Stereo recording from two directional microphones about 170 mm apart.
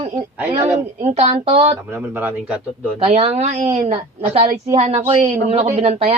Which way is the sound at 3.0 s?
40° right (ahead or behind).